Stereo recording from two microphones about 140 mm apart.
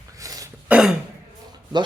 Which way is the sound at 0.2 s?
25° right (ahead or behind).